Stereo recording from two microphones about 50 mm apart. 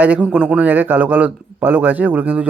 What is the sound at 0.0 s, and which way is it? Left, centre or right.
Speech, right.